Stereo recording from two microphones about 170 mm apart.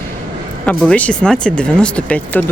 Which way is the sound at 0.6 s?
5° left (ahead or behind).